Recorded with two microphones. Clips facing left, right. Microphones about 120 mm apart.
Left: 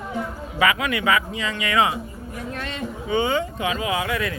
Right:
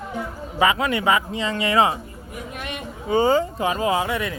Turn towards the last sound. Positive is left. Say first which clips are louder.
# right 2 dB
turn(degrees=-25)  # may be behind; listen again after turning